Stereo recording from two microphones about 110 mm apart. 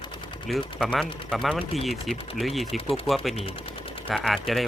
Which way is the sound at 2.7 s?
60° left (ahead or behind).